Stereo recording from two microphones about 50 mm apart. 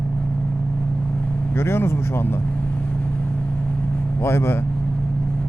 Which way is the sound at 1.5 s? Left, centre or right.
Left.